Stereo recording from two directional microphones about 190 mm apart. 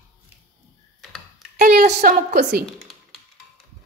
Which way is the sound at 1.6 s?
40° right (ahead or behind).